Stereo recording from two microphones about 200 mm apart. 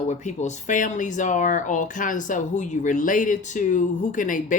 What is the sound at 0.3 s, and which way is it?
Speech, 40° left (ahead or behind).